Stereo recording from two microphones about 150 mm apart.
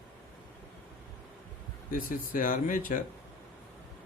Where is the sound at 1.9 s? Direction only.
65° left (ahead or behind).